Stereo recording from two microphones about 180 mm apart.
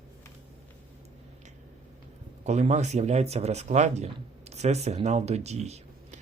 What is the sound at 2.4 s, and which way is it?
Speech, 40° right (ahead or behind).